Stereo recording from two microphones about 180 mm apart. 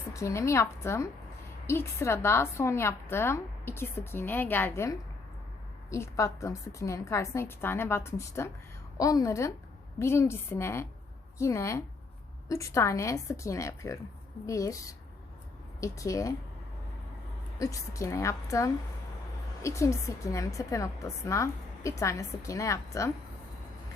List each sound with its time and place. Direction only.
0.1 s a woman's voice: 15° left (ahead or behind)
15.8 s a woman's voice: 20° left (ahead or behind)
17.6 s a woman's voice: 20° left (ahead or behind)